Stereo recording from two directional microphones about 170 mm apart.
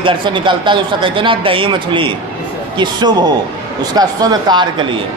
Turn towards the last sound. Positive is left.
turn(degrees=-25)  # may be behind; listen again after turning